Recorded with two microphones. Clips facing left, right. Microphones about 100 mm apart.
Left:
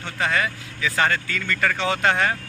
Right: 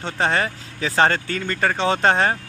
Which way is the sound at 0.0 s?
35° right (ahead or behind).